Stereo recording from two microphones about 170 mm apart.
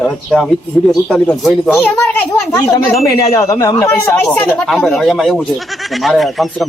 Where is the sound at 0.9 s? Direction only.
Centre (ahead or behind).